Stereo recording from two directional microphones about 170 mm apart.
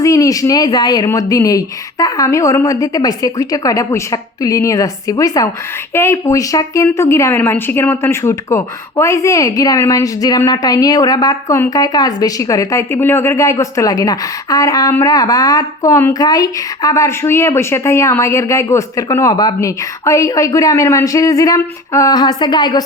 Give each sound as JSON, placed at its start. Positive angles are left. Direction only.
{"t": 0.0, "sound": "a woman's voice", "side_deg": 20}